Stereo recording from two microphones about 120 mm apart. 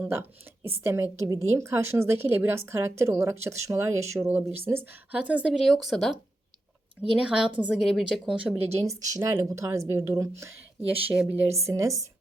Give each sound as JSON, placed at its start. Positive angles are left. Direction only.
{"t": 0.0, "sound": "a woman's voice", "side_deg": -20}
{"t": 7.2, "sound": "a woman's voice", "side_deg": -5}
{"t": 8.7, "sound": "a woman's voice", "side_deg": -30}
{"t": 11.1, "sound": "a woman's voice", "side_deg": -10}